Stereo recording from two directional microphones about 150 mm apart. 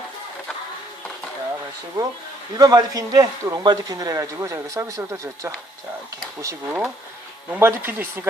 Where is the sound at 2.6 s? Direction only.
25° right (ahead or behind).